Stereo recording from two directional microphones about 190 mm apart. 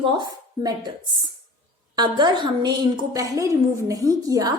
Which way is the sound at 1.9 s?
25° right (ahead or behind).